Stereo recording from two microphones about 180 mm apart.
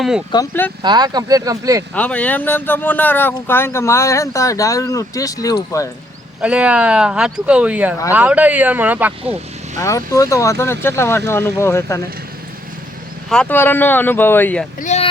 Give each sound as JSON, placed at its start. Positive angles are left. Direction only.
{"t": 0.3, "sound": "speech", "side_deg": 20}
{"t": 0.8, "sound": "speech", "side_deg": -25}
{"t": 2.0, "sound": "speech", "side_deg": 5}
{"t": 6.4, "sound": "speech", "side_deg": -5}
{"t": 9.7, "sound": "speech", "side_deg": 20}
{"t": 13.3, "sound": "speech", "side_deg": 5}
{"t": 14.8, "sound": "a sound", "side_deg": 40}